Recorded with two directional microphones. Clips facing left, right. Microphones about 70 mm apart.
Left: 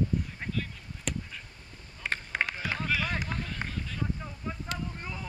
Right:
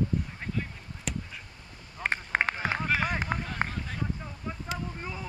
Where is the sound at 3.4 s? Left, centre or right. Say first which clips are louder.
Right 4 dB; right.